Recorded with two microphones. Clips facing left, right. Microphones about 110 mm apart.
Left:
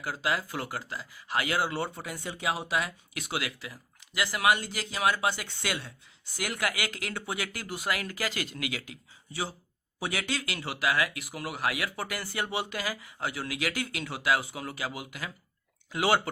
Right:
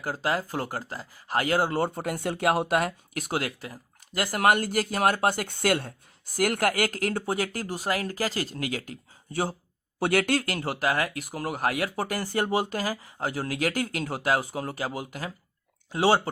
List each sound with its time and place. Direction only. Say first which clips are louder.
0.0 s speech: right 3 dB; 40° right (ahead or behind)